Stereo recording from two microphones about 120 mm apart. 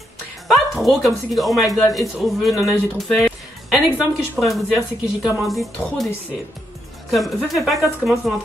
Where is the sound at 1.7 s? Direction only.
30° left (ahead or behind).